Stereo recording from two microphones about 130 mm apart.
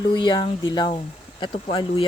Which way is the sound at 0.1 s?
35° left (ahead or behind).